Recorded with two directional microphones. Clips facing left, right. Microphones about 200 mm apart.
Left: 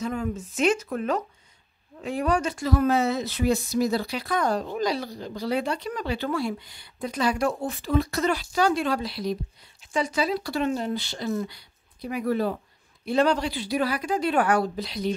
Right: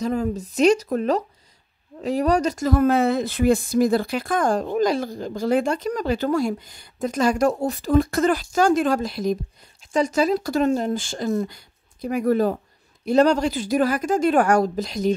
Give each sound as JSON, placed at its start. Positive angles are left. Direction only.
{"t": 0.0, "sound": "speech", "side_deg": -40}